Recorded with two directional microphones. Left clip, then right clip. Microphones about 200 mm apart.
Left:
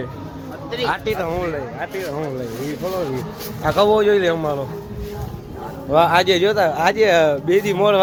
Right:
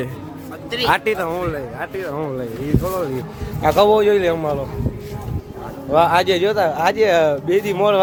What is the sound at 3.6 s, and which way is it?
Speech, 20° right (ahead or behind).